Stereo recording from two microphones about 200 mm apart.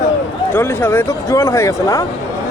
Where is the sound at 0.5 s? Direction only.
10° left (ahead or behind).